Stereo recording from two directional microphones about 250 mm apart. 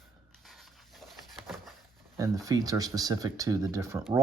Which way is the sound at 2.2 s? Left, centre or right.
Centre.